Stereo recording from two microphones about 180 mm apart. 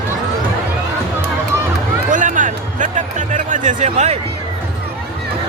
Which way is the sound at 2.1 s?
45° right (ahead or behind).